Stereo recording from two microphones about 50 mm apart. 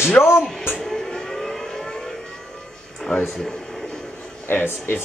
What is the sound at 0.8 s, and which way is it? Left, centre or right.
Vehicle, centre.